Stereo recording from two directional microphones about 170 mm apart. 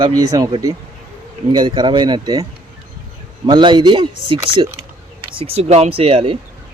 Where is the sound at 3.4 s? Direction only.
25° right (ahead or behind).